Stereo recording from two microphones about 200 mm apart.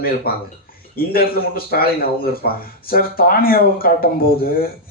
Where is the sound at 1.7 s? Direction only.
50° left (ahead or behind).